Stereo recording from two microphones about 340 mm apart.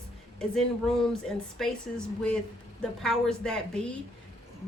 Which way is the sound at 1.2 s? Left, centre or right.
Centre.